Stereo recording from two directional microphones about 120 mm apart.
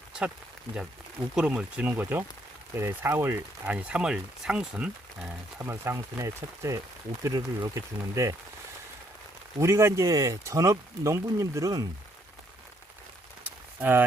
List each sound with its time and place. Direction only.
1.4 s speech: 10° right (ahead or behind)
3.7 s speech: 10° right (ahead or behind)
5.5 s speech: 20° right (ahead or behind)
9.6 s speech: 25° right (ahead or behind)
13.4 s a sound: 15° right (ahead or behind)